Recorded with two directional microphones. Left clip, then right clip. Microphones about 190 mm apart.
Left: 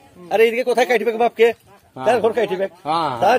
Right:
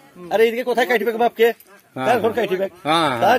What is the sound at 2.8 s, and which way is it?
Speech, 35° right (ahead or behind).